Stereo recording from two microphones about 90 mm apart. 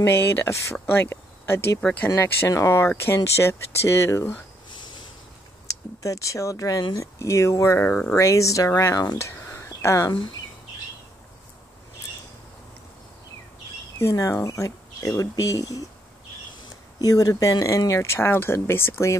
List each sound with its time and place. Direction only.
0.1 s speech: 30° left (ahead or behind)
1.8 s speech: 10° left (ahead or behind)
2.1 s speech: 25° left (ahead or behind)
4.6 s snort: 60° left (ahead or behind)
5.7 s speech: 40° left (ahead or behind)
9.2 s a sound: 30° left (ahead or behind)
13.9 s speech: 35° left (ahead or behind)
17.0 s speech: 45° left (ahead or behind)